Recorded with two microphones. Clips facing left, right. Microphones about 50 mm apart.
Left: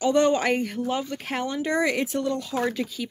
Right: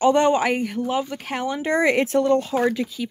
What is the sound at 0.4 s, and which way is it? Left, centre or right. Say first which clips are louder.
Speech: right 2 dB; centre.